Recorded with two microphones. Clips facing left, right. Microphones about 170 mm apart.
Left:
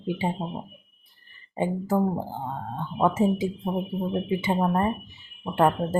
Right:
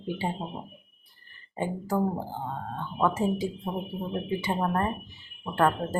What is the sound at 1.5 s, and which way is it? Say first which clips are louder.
Speech: left 4 dB; 20° left (ahead or behind).